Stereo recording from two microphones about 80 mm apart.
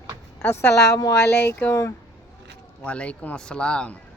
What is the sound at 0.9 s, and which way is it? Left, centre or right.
Speech, left.